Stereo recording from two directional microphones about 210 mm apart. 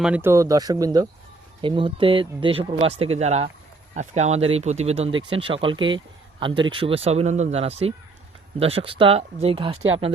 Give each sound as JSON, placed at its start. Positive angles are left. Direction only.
{"t": 0.0, "sound": "speech", "side_deg": -10}